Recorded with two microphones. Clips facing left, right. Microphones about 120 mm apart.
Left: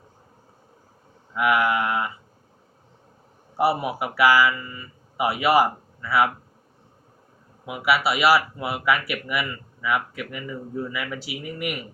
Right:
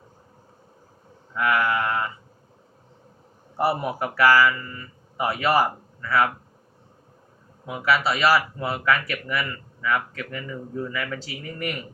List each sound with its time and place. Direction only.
1.3 s speech: 15° left (ahead or behind)
3.6 s speech: 5° left (ahead or behind)
7.6 s speech: 10° left (ahead or behind)